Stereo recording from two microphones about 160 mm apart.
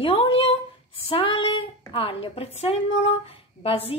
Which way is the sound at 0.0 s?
35° left (ahead or behind).